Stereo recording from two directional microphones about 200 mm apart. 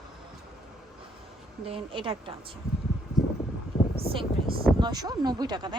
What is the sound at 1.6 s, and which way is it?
Speech, 25° right (ahead or behind).